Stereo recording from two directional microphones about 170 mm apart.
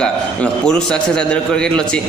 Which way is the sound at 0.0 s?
5° left (ahead or behind).